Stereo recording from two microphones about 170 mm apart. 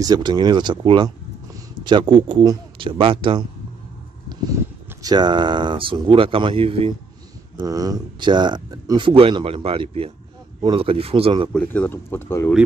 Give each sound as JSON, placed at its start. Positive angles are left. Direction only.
{"t": 0.0, "sound": "speech", "side_deg": -25}
{"t": 5.0, "sound": "speech", "side_deg": -25}
{"t": 7.5, "sound": "speech", "side_deg": -20}
{"t": 11.5, "sound": "speech", "side_deg": 10}